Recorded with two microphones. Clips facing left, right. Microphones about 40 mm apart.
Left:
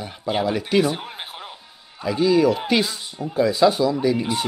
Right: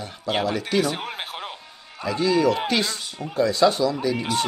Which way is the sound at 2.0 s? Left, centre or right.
Centre.